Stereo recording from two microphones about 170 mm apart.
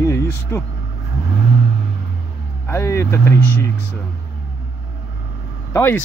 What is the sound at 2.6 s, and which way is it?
Speech, 15° left (ahead or behind).